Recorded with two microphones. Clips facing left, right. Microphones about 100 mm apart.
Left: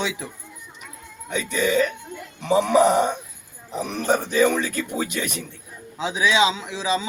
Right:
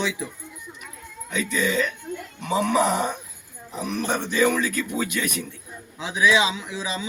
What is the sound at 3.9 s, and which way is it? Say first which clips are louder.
Speech: left 4 dB; 40° left (ahead or behind).